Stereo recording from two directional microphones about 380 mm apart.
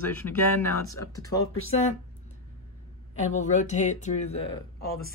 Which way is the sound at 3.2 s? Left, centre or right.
Centre.